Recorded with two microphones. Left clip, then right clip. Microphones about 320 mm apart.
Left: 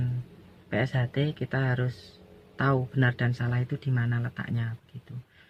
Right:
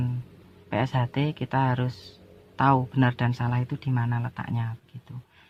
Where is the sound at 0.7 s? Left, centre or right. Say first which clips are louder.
Right 2 dB; right.